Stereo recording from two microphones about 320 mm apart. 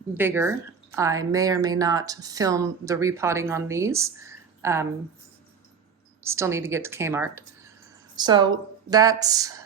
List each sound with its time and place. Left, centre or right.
0.1 s speech: centre
6.2 s speech: centre